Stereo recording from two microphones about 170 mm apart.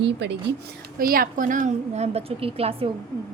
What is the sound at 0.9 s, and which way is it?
A woman's voice, 60° right (ahead or behind).